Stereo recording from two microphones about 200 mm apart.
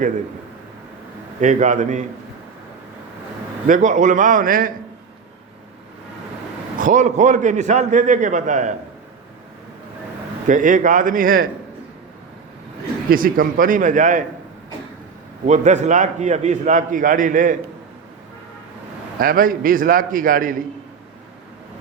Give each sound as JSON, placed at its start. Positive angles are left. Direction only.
{"t": 1.4, "sound": "a man's voice", "side_deg": -35}
{"t": 3.7, "sound": "a man's voice", "side_deg": -40}
{"t": 6.7, "sound": "a man's voice", "side_deg": -40}
{"t": 10.5, "sound": "a man's voice", "side_deg": -40}
{"t": 13.1, "sound": "a man's voice", "side_deg": -45}
{"t": 15.4, "sound": "a man's voice", "side_deg": -35}
{"t": 19.2, "sound": "a man's voice", "side_deg": -45}